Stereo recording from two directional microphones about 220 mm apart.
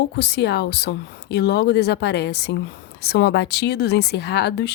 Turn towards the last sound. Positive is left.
turn(degrees=50)  # may be behind; listen again after turning